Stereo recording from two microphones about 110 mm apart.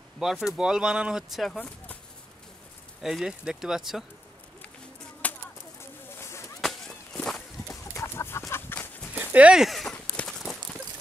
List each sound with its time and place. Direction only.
0.2 s speech: 5° right (ahead or behind)
3.0 s speech: 5° right (ahead or behind)
5.2 s chop: 15° left (ahead or behind)
5.8 s a sound: 25° left (ahead or behind)
7.2 s walk: 5° left (ahead or behind)
7.6 s chicken: 25° left (ahead or behind)
9.1 s speech: 15° right (ahead or behind)
10.1 s clip-clop: 5° left (ahead or behind)